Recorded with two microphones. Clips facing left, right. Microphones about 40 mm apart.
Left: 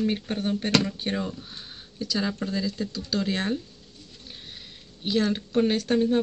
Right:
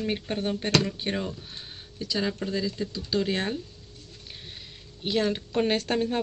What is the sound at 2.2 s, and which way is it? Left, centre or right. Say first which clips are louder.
Speech: even; centre.